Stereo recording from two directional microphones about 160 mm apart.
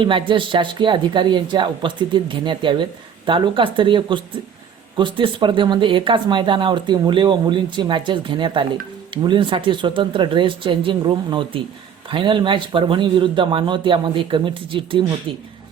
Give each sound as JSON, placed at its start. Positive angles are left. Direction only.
{"t": 0.0, "sound": "speech", "side_deg": -30}